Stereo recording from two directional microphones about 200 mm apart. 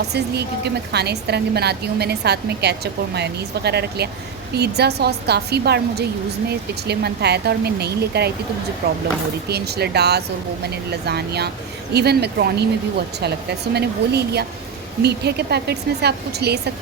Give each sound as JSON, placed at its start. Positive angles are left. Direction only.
{"t": 0.1, "sound": "a woman's voice", "side_deg": -55}
{"t": 13.7, "sound": "a woman's voice", "side_deg": -55}